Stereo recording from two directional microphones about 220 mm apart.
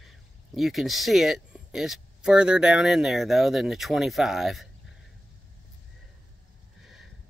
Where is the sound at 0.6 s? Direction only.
Centre (ahead or behind).